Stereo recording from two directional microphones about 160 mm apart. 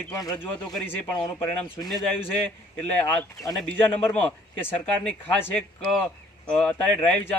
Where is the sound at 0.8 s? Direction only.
25° left (ahead or behind).